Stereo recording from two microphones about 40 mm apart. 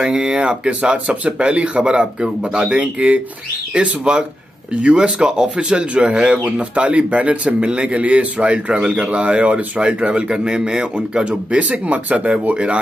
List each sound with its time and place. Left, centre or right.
0.0 s speech: centre
1.2 s speech: right
6.4 s speech: right
9.8 s speech: right
11.2 s speech: right